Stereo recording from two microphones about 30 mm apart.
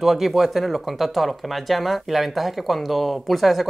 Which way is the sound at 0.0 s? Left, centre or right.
Centre.